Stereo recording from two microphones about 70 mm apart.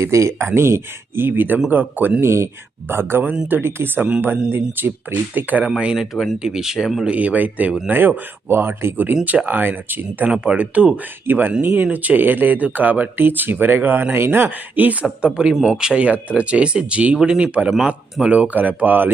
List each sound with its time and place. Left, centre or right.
0.0 s speech: right
1.5 s speech: centre
2.2 s speech: right
5.8 s speech: centre; by 10.2 s right
10.2 s speech: centre
15.0 s speech: centre